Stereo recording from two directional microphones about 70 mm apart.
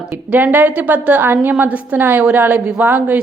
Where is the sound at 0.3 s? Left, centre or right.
Right.